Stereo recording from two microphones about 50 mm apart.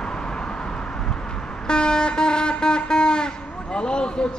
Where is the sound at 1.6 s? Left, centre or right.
Centre.